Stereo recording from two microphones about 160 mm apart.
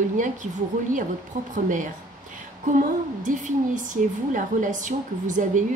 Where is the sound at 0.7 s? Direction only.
55° right (ahead or behind).